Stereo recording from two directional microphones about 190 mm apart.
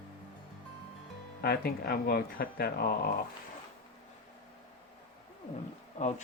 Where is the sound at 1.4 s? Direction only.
55° left (ahead or behind).